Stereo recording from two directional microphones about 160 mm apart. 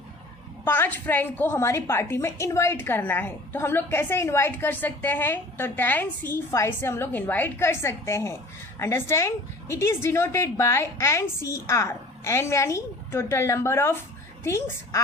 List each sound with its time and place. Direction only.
0.6 s a woman's voice: 10° left (ahead or behind)